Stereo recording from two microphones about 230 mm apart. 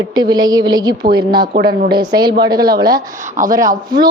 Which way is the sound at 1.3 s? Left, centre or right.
Right.